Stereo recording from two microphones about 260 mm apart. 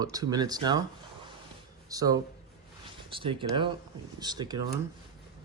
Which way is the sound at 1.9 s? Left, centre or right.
Centre.